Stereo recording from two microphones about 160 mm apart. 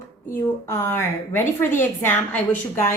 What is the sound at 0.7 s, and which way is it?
A woman's voice, 15° left (ahead or behind).